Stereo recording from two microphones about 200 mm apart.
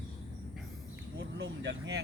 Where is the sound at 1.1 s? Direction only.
65° right (ahead or behind).